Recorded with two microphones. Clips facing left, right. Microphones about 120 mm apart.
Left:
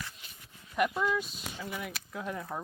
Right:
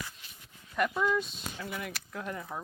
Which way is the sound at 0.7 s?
5° left (ahead or behind).